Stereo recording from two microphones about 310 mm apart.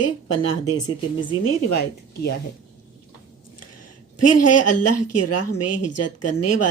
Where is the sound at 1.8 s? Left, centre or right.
Left.